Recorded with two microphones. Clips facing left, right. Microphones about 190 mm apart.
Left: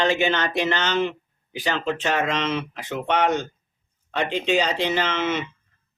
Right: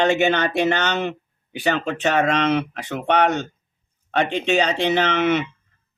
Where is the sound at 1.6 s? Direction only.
65° right (ahead or behind).